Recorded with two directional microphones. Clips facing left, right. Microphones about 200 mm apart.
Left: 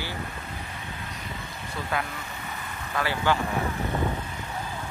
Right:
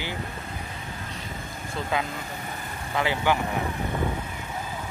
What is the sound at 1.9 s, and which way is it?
Speech, 20° right (ahead or behind).